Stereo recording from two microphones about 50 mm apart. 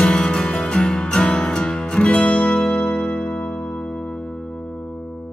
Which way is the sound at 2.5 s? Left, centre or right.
Centre.